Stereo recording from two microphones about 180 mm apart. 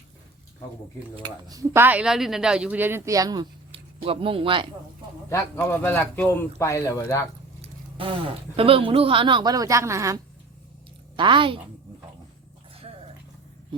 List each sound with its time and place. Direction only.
1.1 s speech: 25° right (ahead or behind)
5.3 s speech: 10° left (ahead or behind)
7.6 s speech: 30° right (ahead or behind)
11.2 s speech: 25° right (ahead or behind)